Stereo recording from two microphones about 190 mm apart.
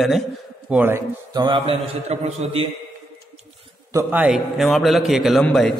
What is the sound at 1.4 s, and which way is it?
A man's voice, 25° right (ahead or behind).